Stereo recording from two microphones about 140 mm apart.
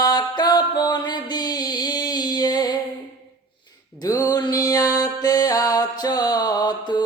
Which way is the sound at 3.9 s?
25° left (ahead or behind).